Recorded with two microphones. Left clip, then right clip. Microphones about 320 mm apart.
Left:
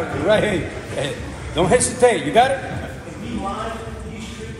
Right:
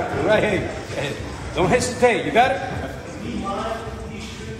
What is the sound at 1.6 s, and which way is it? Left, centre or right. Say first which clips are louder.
Speech: left 2 dB; left.